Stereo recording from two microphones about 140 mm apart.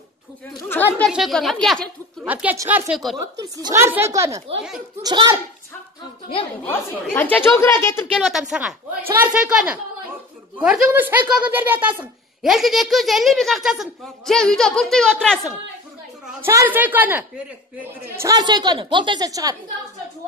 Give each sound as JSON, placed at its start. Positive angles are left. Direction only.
{"t": 0.7, "sound": "chatter", "side_deg": 15}
{"t": 1.0, "sound": "speech", "side_deg": 0}
{"t": 2.2, "sound": "speech", "side_deg": -10}
{"t": 2.9, "sound": "speech", "side_deg": 0}
{"t": 3.2, "sound": "a woman's voice", "side_deg": -25}
{"t": 7.2, "sound": "speech", "side_deg": 15}
{"t": 8.2, "sound": "speech", "side_deg": 0}
{"t": 12.4, "sound": "speech", "side_deg": 0}
{"t": 16.3, "sound": "a woman's voice", "side_deg": -15}